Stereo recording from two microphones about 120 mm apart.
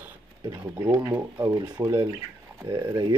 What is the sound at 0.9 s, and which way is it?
Speech, 25° right (ahead or behind).